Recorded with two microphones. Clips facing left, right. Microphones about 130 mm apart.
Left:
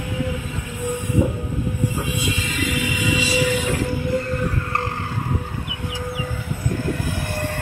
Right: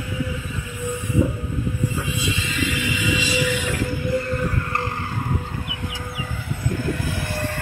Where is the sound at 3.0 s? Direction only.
35° left (ahead or behind).